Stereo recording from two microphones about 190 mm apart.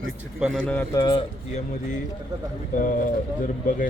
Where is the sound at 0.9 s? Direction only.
20° left (ahead or behind).